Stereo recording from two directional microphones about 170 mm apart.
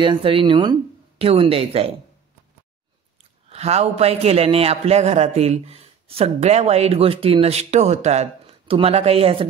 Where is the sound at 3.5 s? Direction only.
40° right (ahead or behind).